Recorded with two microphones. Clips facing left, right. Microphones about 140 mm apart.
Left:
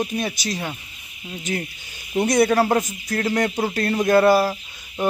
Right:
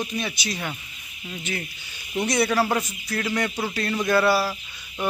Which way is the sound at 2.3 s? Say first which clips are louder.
Left 5 dB; 45° left (ahead or behind).